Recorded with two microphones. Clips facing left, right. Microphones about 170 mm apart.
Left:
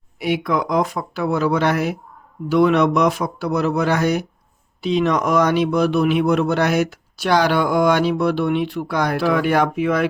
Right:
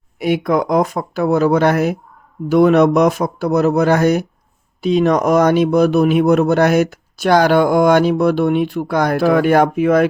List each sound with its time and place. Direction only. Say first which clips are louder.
0.2 s speech: right 4 dB; 45° right (ahead or behind)